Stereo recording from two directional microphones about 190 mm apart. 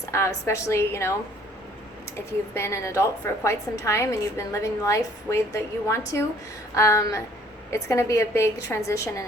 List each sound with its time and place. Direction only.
0.0 s a woman's voice: 15° left (ahead or behind)
2.6 s a woman's voice: 15° left (ahead or behind)